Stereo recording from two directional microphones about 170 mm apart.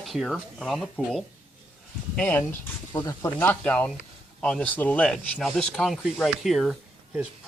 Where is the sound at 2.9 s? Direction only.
20° left (ahead or behind).